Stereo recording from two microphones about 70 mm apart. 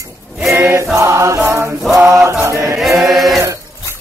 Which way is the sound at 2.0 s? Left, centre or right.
Right.